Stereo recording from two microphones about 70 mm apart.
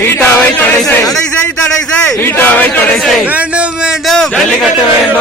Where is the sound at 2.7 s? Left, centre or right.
Centre.